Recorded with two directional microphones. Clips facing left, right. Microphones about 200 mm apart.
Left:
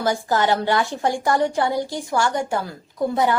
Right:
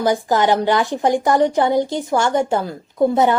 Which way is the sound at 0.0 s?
15° right (ahead or behind).